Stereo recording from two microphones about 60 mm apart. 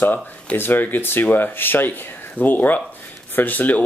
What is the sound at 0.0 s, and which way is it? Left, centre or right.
Speech, left.